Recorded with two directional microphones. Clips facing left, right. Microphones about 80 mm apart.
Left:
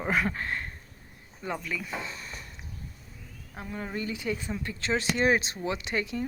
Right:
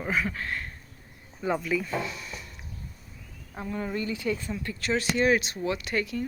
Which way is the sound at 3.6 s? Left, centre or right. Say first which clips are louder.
Right 3 dB; centre.